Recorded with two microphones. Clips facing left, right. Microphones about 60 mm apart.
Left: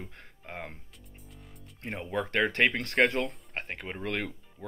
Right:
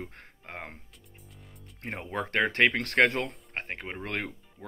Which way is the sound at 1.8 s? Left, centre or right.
Right.